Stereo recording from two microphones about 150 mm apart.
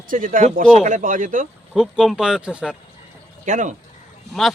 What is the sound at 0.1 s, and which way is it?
Speech, 65° right (ahead or behind).